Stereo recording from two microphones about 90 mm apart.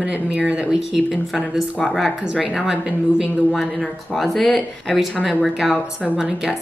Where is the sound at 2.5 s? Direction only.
10° right (ahead or behind).